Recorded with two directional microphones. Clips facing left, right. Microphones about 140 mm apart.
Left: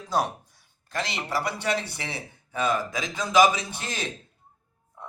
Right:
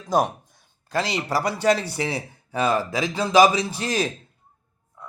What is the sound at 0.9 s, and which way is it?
A man's voice, 35° right (ahead or behind).